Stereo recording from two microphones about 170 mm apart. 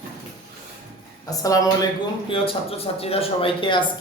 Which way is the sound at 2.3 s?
35° left (ahead or behind).